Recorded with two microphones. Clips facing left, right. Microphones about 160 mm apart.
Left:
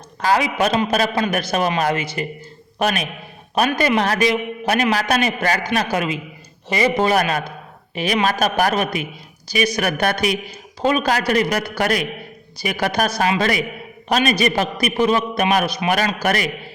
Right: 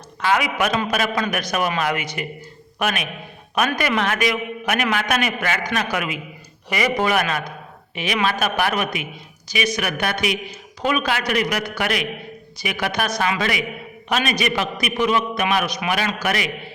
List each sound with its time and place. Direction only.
0.2 s a man's voice: 35° left (ahead or behind)
15.9 s a man's voice: 40° left (ahead or behind)